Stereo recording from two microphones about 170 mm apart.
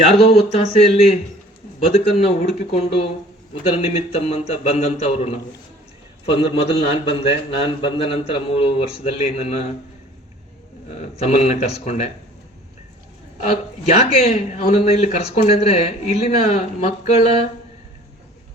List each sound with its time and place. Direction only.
0.0 s a man's voice: 35° left (ahead or behind)
10.9 s a man's voice: 40° left (ahead or behind)
13.4 s a man's voice: 40° left (ahead or behind)